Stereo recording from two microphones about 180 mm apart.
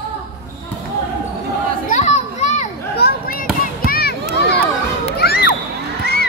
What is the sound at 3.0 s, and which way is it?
Basketball bounce, 55° left (ahead or behind).